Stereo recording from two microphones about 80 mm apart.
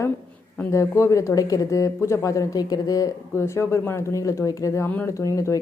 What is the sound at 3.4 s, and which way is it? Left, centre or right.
Speech, left.